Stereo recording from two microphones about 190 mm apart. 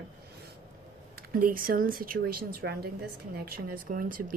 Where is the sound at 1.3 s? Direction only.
50° right (ahead or behind).